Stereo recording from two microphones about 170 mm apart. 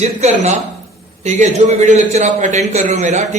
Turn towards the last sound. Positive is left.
turn(degrees=-45)  # may be behind; listen again after turning